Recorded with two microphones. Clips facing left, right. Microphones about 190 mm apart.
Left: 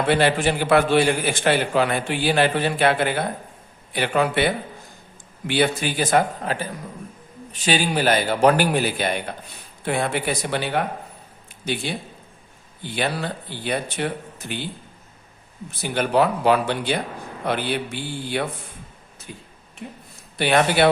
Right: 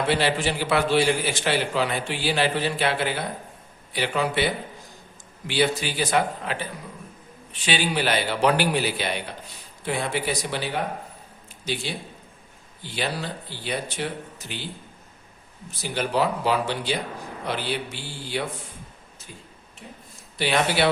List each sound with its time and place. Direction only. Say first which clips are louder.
0.1 s a man's voice: left 7 dB; 55° left (ahead or behind)
15.8 s speech: left 4 dB; 55° left (ahead or behind)
19.3 s speech: left 6 dB; 65° left (ahead or behind)
20.4 s a man's voice: left 4 dB; 55° left (ahead or behind)